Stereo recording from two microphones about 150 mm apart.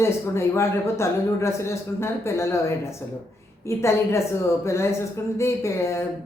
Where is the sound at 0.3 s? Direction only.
20° left (ahead or behind).